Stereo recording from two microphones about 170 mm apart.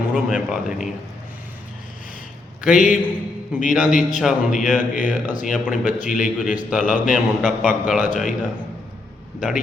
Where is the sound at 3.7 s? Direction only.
5° right (ahead or behind).